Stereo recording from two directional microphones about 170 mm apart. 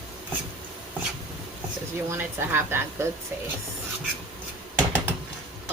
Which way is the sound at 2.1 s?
15° right (ahead or behind).